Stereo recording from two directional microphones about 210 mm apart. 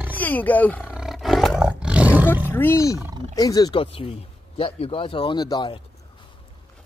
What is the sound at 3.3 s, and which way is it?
Speech, 15° left (ahead or behind).